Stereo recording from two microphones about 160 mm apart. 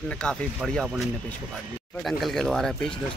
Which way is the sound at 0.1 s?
5° left (ahead or behind).